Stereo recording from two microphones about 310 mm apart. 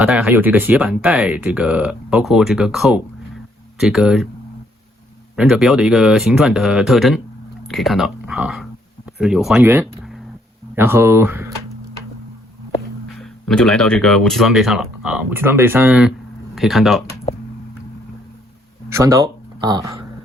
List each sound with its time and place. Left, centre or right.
0.0 s speech: centre
5.4 s speech: centre
9.8 s a sound: centre
10.8 s speech: centre
13.5 s speech: centre
18.9 s speech: centre